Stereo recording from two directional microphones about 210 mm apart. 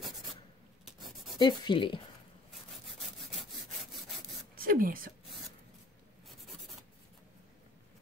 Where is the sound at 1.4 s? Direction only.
20° left (ahead or behind).